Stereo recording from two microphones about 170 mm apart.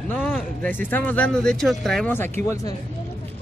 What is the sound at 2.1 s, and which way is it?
Speech, 15° left (ahead or behind).